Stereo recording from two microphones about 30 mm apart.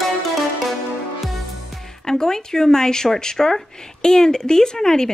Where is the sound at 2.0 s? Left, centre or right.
Left.